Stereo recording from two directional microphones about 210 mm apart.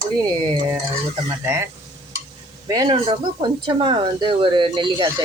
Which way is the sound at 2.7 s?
20° right (ahead or behind).